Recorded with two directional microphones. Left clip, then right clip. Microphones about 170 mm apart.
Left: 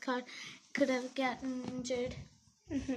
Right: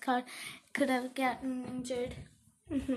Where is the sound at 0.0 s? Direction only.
25° right (ahead or behind).